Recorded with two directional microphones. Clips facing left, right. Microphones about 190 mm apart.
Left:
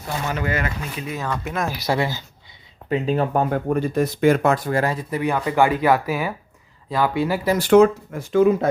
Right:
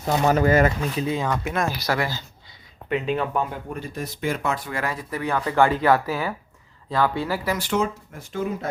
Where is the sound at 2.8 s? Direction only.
35° left (ahead or behind); by 4.7 s 50° left (ahead or behind).